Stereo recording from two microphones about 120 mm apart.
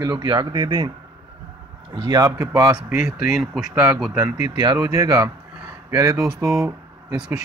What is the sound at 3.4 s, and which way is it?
Speech, centre (ahead or behind).